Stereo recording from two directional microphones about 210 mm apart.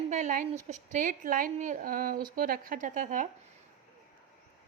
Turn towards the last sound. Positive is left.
turn(degrees=-40)  # may be behind; listen again after turning